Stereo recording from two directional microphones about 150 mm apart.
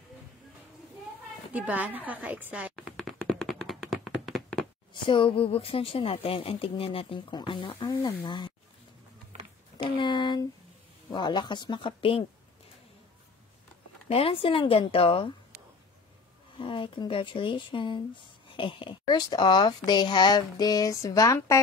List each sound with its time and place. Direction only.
1.5 s a woman's voice: 10° right (ahead or behind)
2.7 s tap: 5° left (ahead or behind)
4.9 s a woman's voice: 35° left (ahead or behind)
9.8 s a woman's voice: 35° left (ahead or behind)
14.0 s a woman's voice: 40° left (ahead or behind)
16.5 s speech: 35° left (ahead or behind)